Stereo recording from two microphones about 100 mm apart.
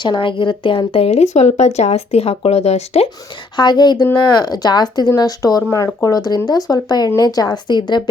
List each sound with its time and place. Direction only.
0.0 s a woman's voice: 55° left (ahead or behind); by 3.1 s 90° left
3.6 s a woman's voice: 45° left (ahead or behind)